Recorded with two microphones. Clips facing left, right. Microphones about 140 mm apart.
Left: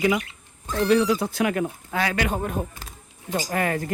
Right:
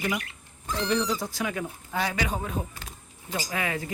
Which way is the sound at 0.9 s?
70° left (ahead or behind).